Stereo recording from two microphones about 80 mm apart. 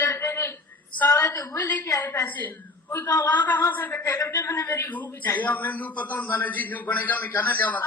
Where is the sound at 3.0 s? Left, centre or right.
Left.